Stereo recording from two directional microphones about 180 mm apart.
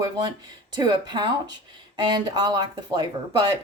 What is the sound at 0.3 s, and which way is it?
Speech, 25° right (ahead or behind).